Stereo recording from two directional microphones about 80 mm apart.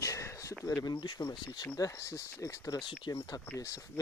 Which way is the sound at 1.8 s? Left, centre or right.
Left.